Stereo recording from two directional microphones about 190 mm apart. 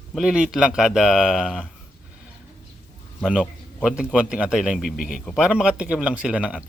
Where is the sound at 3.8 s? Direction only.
5° right (ahead or behind).